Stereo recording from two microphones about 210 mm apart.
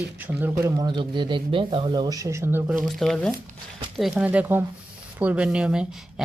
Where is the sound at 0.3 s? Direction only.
10° right (ahead or behind).